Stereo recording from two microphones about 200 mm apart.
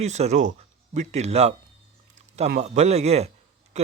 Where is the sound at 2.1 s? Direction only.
35° right (ahead or behind).